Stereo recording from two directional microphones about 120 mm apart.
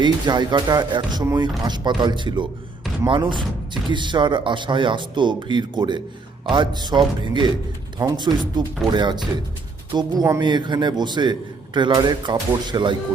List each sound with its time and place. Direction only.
0.0 s a man's voice: 40° right (ahead or behind)